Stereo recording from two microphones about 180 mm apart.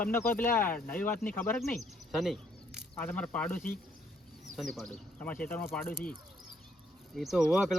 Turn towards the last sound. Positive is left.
turn(degrees=-5)  # may be behind; listen again after turning